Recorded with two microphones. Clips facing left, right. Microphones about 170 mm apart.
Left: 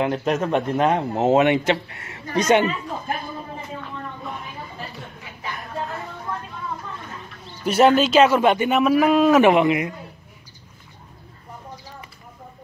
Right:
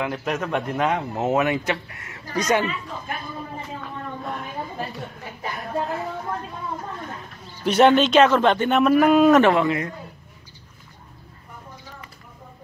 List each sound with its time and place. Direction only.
0.0 s speech: 30° left (ahead or behind)
7.6 s speech: centre (ahead or behind)
9.4 s speech: 15° left (ahead or behind)